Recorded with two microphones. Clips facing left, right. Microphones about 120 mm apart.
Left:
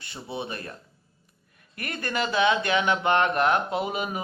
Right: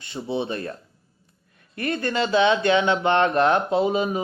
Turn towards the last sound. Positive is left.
turn(degrees=-30)  # may be behind; listen again after turning